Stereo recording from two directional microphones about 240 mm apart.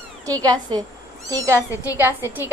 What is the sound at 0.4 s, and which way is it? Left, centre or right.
A woman's voice, centre.